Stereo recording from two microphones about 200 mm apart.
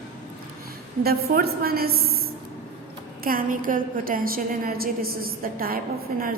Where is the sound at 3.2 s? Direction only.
45° right (ahead or behind).